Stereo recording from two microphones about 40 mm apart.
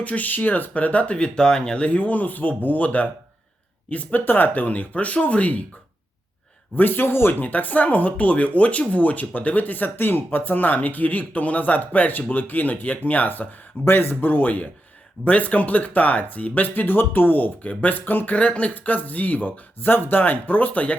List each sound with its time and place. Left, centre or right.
0.0 s speech: left
0.7 s speech: left
4.1 s speech: left
6.7 s speech: left
7.4 s speech: left
13.8 s speech: left
15.2 s speech: left
18.3 s speech: left
18.7 s speech: left